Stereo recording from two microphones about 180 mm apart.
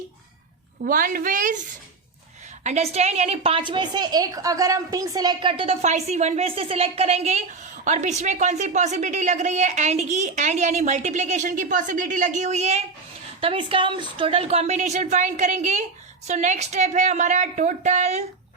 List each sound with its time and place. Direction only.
0.9 s a woman's voice: 50° right (ahead or behind)
2.6 s a woman's voice: 40° right (ahead or behind)